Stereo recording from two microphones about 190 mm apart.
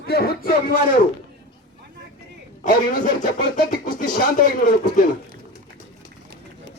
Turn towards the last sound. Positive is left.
turn(degrees=45)  # may be behind; listen again after turning